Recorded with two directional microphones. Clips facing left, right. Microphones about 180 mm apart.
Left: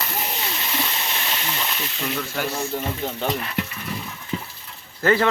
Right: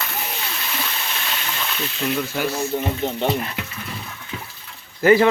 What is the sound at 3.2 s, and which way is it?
Speech, 25° right (ahead or behind).